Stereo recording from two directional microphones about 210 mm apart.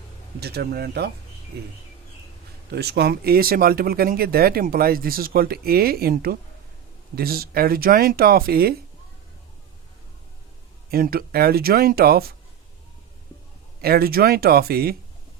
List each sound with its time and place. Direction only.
0.3 s speech: 50° right (ahead or behind)
2.7 s speech: 50° right (ahead or behind)
10.9 s speech: 45° right (ahead or behind)
13.8 s speech: 45° right (ahead or behind)